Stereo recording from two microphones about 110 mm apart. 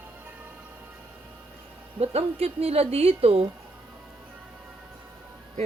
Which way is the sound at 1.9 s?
60° right (ahead or behind).